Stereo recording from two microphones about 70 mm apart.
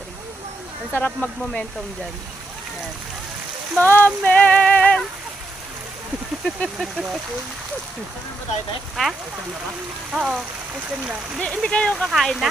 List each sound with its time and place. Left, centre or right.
0.9 s speech: left
3.8 s music: left
6.4 s speech: centre
9.0 s speech: centre
10.1 s speech: centre
11.3 s speech: centre
11.9 s speech: centre